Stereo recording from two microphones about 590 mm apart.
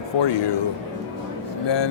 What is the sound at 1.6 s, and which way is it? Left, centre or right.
Speech, left.